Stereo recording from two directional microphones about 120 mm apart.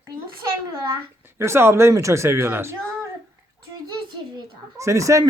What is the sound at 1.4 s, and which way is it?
Speech, 20° right (ahead or behind).